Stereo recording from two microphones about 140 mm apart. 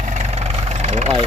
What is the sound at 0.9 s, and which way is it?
Speech, 55° right (ahead or behind).